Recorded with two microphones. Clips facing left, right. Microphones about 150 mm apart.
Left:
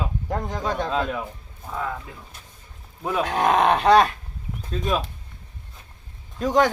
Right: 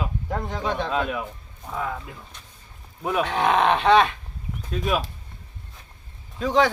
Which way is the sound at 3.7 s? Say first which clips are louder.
Left 1 dB; 40° left (ahead or behind).